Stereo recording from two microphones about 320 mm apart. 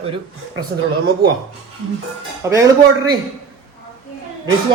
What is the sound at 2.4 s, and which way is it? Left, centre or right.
Speech, centre.